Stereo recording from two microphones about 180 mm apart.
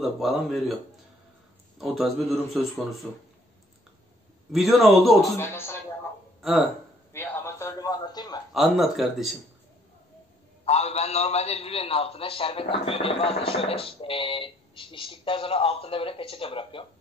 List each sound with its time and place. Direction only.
0.0 s a man's voice: centre (ahead or behind)
1.8 s a man's voice: centre (ahead or behind)
4.5 s a man's voice: centre (ahead or behind)
5.4 s speech: 15° left (ahead or behind)
6.4 s speech: centre (ahead or behind)
7.1 s a man's voice: 15° left (ahead or behind)
8.5 s a man's voice: centre (ahead or behind)
10.6 s a man's voice: 35° left (ahead or behind)